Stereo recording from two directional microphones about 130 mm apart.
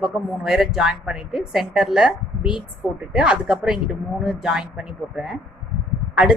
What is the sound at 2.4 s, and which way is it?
Speech, 40° left (ahead or behind).